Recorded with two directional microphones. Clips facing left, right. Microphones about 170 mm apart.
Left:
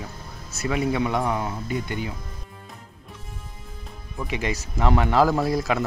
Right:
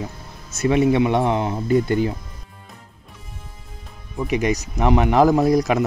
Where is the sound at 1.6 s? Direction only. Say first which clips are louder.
Right 10 dB; 40° right (ahead or behind).